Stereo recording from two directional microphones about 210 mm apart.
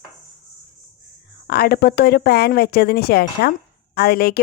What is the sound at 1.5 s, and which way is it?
Speech, 45° left (ahead or behind).